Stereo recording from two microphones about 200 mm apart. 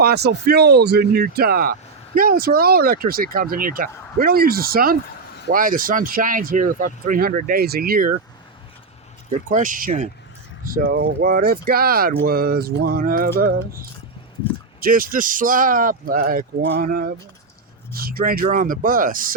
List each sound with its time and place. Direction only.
0.0 s speech: 55° right (ahead or behind)
9.5 s speech: 40° right (ahead or behind)